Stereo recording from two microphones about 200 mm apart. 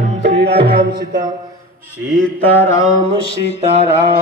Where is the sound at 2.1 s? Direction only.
5° left (ahead or behind).